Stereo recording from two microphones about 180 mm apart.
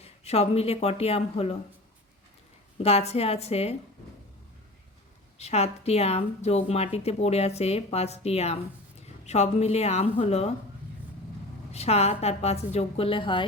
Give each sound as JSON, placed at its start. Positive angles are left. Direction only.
{"t": 0.0, "sound": "speech", "side_deg": 35}
{"t": 2.8, "sound": "a woman's voice", "side_deg": 35}
{"t": 5.4, "sound": "a woman's voice", "side_deg": 35}
{"t": 11.7, "sound": "a woman's voice", "side_deg": 35}